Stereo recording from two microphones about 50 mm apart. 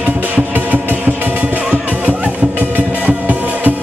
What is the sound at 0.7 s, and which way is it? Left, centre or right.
Music, right.